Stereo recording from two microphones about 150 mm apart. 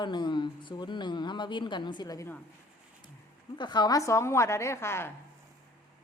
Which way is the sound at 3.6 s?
30° left (ahead or behind).